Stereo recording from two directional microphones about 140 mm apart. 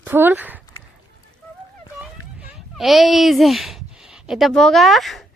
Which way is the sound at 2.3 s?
10° right (ahead or behind).